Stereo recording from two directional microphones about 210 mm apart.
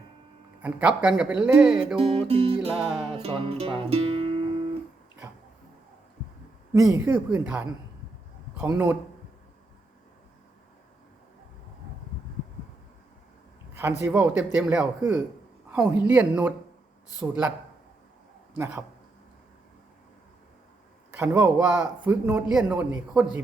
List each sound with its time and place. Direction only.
0.6 s speech: 5° right (ahead or behind)
2.0 s music: 30° right (ahead or behind)
2.6 s speech: centre (ahead or behind)
3.2 s speech: 25° right (ahead or behind)
6.7 s a man's voice: 15° right (ahead or behind)
14.0 s a man's voice: 10° right (ahead or behind)
18.5 s speech: 10° right (ahead or behind)
21.2 s a man's voice: 10° right (ahead or behind)